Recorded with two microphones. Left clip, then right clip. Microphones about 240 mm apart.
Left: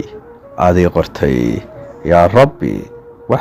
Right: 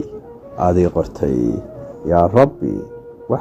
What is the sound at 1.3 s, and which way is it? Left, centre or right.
Speech, left.